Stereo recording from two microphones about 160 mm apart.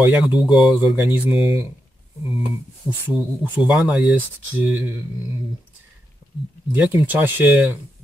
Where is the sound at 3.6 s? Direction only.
5° right (ahead or behind).